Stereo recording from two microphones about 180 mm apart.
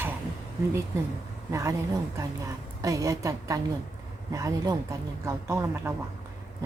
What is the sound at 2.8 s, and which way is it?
A woman's voice, 20° right (ahead or behind).